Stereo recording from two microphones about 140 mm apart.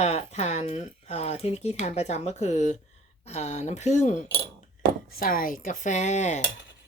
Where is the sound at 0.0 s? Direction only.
50° left (ahead or behind).